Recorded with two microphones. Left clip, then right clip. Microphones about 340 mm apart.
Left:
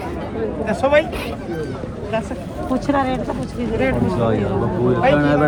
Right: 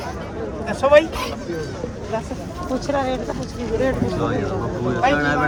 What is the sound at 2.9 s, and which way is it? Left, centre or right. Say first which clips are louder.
Speech: left 3 dB; left.